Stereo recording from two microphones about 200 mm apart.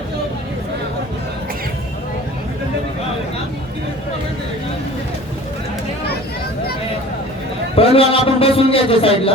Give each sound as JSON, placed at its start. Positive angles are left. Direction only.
{"t": 7.8, "sound": "a man's voice", "side_deg": 30}